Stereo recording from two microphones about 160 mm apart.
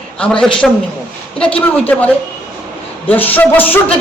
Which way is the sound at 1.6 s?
10° left (ahead or behind).